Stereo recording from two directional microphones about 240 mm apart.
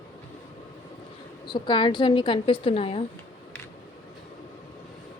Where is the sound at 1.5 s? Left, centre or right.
Centre.